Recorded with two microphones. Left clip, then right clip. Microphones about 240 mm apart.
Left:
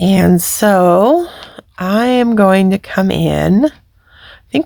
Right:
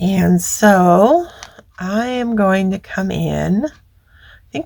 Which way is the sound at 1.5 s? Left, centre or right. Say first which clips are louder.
Left 5 dB; left.